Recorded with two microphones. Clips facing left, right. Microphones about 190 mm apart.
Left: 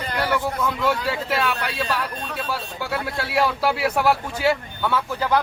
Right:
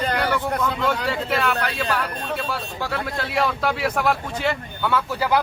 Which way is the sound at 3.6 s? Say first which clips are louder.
Left 2 dB; 5° left (ahead or behind).